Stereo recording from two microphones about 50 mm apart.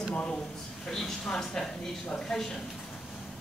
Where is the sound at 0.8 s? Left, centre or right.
Centre.